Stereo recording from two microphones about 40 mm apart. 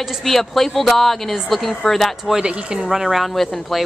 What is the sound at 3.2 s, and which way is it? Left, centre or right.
Speech, centre.